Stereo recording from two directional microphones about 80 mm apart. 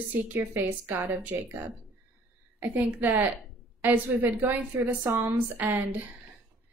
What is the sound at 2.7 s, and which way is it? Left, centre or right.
A woman's voice, right.